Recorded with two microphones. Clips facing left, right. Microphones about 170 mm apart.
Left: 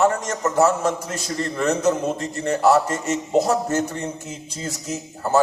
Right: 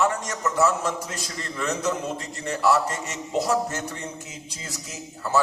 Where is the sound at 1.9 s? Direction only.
45° left (ahead or behind).